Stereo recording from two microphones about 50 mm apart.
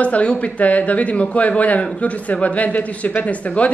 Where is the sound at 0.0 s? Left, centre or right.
Left.